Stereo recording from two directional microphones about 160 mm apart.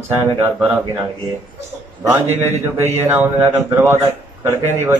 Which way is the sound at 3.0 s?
15° right (ahead or behind).